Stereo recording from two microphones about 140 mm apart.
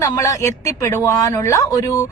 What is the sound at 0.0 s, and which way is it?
Speech, 20° left (ahead or behind).